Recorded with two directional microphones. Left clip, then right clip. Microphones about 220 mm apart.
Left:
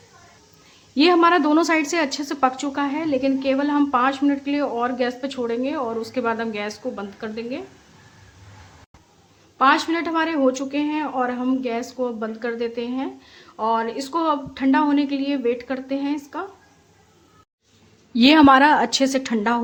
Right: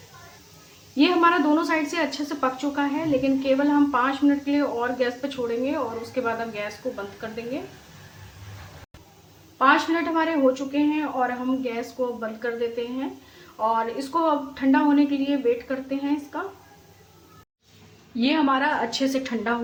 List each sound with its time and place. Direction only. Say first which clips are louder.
0.9 s a woman's voice: left 3 dB; 50° left (ahead or behind)
9.6 s a woman's voice: left 2 dB; 50° left (ahead or behind)
18.1 s a woman's voice: left 9 dB; 55° left (ahead or behind)